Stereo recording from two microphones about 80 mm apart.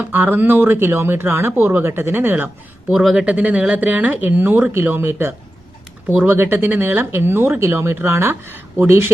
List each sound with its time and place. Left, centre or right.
0.0 s speech: right
2.9 s speech: centre
3.2 s speech: centre